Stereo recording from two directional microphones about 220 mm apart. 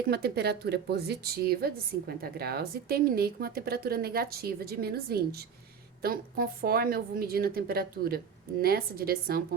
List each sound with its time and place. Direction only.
0.1 s a woman's voice: 45° right (ahead or behind)